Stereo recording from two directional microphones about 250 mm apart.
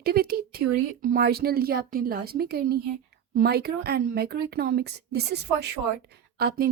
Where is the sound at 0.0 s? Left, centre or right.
Right.